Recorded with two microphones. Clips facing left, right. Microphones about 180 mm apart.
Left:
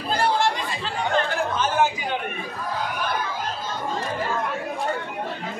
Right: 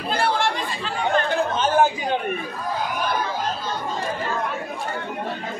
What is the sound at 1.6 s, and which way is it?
Chatter, 30° right (ahead or behind).